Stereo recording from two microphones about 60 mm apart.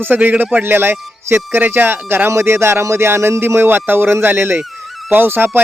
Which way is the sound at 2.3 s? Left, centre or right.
Right.